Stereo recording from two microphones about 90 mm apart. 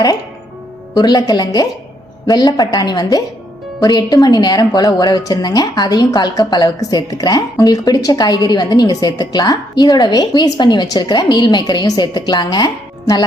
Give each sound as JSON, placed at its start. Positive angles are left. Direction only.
{"t": 0.9, "sound": "a woman's voice", "side_deg": 45}